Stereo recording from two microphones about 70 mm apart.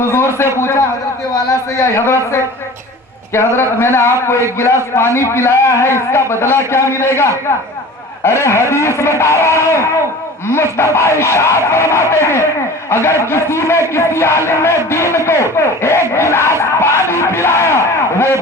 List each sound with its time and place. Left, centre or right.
0.1 s a man's voice: left
17.1 s music: left